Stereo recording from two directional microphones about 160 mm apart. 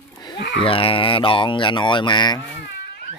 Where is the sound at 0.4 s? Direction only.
90° left.